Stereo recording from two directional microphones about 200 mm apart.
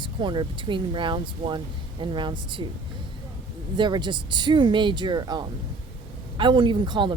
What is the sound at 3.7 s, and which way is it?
A woman's voice, 20° right (ahead or behind).